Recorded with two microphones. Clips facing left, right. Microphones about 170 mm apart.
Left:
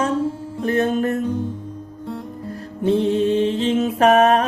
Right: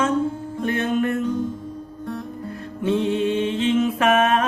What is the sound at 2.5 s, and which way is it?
Music, 35° left (ahead or behind).